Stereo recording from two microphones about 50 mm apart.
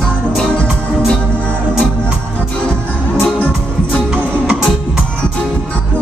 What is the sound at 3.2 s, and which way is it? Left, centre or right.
Music, left.